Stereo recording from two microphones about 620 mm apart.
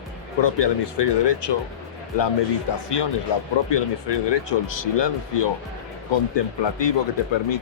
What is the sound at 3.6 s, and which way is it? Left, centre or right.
Speech, left.